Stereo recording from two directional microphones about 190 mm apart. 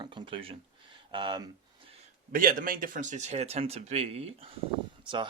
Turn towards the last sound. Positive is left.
turn(degrees=-25)  # may be behind; listen again after turning